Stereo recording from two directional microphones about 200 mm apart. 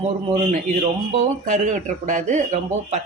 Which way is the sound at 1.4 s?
40° right (ahead or behind).